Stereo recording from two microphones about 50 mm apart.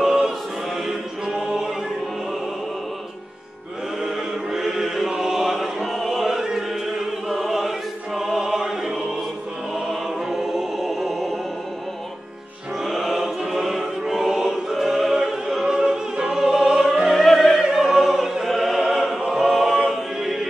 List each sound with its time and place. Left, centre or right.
0.0 s choir: centre
4.0 s music: centre
9.8 s choir: centre
12.8 s choir: centre
17.4 s opera: centre
19.9 s choir: centre